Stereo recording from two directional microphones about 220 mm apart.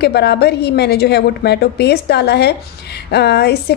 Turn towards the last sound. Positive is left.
turn(degrees=50)  # may be behind; listen again after turning